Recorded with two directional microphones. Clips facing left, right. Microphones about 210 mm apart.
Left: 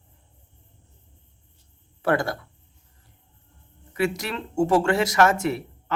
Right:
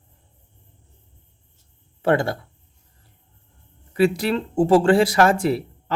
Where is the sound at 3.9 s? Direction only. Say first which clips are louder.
Right 7 dB; 30° right (ahead or behind).